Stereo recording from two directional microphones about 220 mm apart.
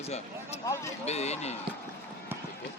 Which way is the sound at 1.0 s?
30° left (ahead or behind).